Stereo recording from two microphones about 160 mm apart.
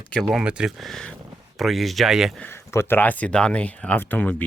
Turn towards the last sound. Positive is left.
turn(degrees=10)  # may be behind; listen again after turning